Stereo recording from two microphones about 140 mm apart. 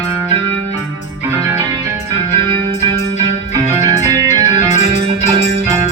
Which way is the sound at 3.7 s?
25° right (ahead or behind).